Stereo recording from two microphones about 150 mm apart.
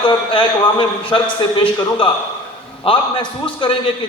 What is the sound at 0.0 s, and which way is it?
A man's voice, 35° left (ahead or behind).